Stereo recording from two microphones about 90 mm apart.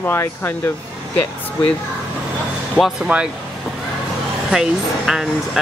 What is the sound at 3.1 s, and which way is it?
Speech, 15° right (ahead or behind).